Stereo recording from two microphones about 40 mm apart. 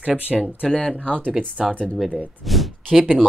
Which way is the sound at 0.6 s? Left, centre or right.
Centre.